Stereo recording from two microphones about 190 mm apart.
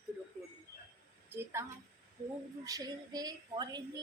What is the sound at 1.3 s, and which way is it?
Speech, 15° right (ahead or behind).